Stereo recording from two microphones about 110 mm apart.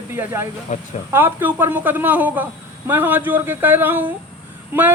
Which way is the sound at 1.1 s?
20° right (ahead or behind).